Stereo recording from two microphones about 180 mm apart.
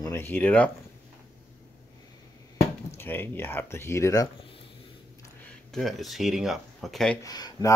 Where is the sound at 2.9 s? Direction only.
10° left (ahead or behind).